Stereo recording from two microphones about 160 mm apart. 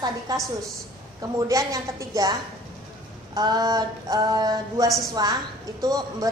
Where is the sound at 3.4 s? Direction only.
25° right (ahead or behind).